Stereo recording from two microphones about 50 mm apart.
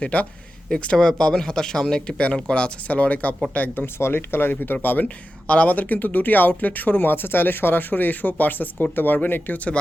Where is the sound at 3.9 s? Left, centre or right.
Left.